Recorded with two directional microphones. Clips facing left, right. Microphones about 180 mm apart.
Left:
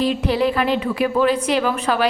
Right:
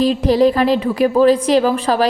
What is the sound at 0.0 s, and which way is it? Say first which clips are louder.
A woman's voice: right 6 dB; 40° right (ahead or behind).